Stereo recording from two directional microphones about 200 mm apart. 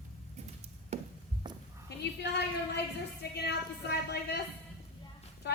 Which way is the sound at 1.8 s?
55° left (ahead or behind).